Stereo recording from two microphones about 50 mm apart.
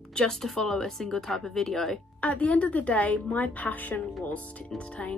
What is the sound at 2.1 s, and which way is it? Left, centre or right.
A woman's voice, left.